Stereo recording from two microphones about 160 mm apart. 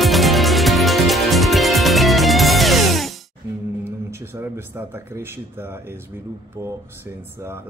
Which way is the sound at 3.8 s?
15° right (ahead or behind).